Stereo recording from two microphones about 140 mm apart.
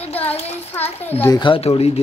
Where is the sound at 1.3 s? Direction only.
35° left (ahead or behind).